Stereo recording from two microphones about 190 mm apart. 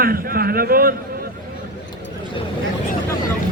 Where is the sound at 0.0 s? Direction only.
50° right (ahead or behind).